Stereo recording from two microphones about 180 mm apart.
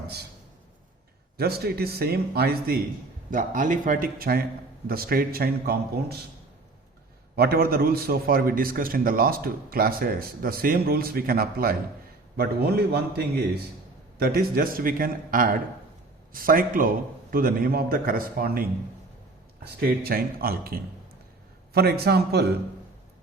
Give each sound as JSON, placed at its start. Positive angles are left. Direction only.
{"t": 1.4, "sound": "a man's voice", "side_deg": -60}
{"t": 3.2, "sound": "a man's voice", "side_deg": -45}
{"t": 7.3, "sound": "a man's voice", "side_deg": -55}
{"t": 19.8, "sound": "a man's voice", "side_deg": -60}